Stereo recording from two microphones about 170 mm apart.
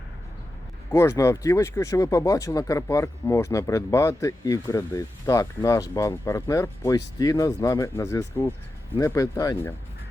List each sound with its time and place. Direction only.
0.9 s speech: 15° left (ahead or behind)